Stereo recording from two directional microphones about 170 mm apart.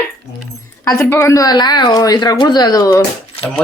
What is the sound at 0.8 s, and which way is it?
Speech, 15° left (ahead or behind).